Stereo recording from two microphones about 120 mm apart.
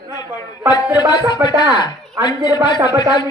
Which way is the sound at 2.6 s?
40° left (ahead or behind).